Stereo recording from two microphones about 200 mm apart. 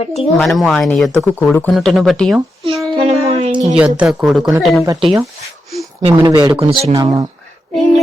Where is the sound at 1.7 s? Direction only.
Centre (ahead or behind).